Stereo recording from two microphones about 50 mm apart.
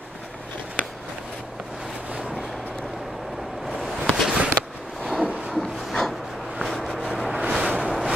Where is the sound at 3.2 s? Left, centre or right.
Centre.